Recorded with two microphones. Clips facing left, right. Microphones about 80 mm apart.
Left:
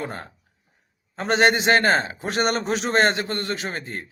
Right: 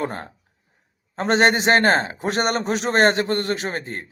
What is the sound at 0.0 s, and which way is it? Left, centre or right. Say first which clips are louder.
Speech: right 4 dB; right.